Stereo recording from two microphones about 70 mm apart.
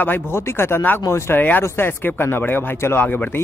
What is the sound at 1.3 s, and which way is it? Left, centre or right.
Speech, left.